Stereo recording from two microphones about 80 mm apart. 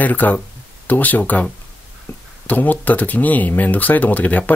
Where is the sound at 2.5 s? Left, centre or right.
Left.